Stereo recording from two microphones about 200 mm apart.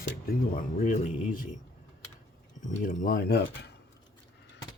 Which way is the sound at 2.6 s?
40° left (ahead or behind).